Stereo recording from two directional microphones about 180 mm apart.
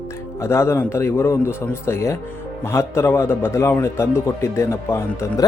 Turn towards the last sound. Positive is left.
turn(degrees=15)  # may be behind; listen again after turning